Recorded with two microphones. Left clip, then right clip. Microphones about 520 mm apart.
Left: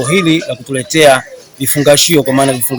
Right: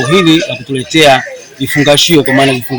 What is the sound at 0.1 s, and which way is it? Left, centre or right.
Speech, left.